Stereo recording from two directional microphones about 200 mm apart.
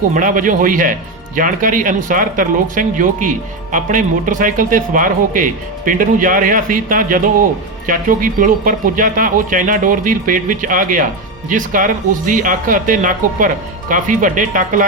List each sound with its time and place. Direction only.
0.1 s speech: 40° right (ahead or behind)